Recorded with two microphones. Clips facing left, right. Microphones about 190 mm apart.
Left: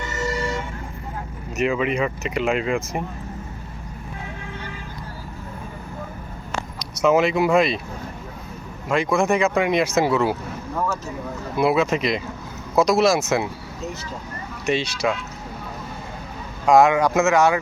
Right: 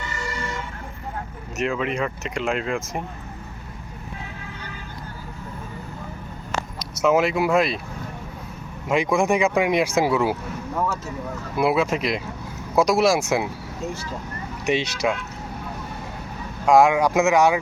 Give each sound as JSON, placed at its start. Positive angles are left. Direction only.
{"t": 1.5, "sound": "speech", "side_deg": 5}
{"t": 6.7, "sound": "speech", "side_deg": -5}
{"t": 8.9, "sound": "speech", "side_deg": -15}
{"t": 11.5, "sound": "speech", "side_deg": -10}
{"t": 14.7, "sound": "speech", "side_deg": -15}
{"t": 16.6, "sound": "speech", "side_deg": -10}